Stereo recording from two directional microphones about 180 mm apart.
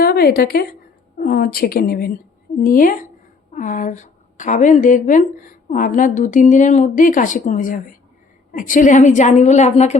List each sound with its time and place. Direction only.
0.0 s a woman's voice: 60° left (ahead or behind); by 10.0 s 40° left (ahead or behind)